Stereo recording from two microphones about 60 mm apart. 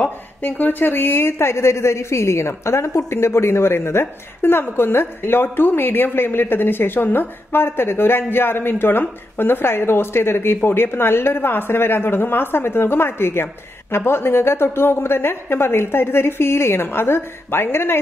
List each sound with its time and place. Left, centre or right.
0.4 s a woman's voice: left